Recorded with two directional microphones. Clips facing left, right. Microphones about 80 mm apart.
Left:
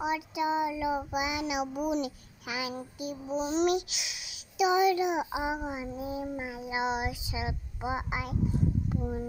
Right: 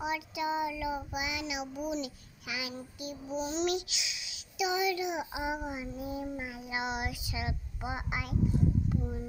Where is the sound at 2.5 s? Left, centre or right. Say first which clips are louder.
Left 4 dB; left.